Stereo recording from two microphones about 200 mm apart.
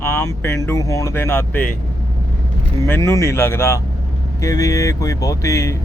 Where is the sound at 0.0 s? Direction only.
15° left (ahead or behind).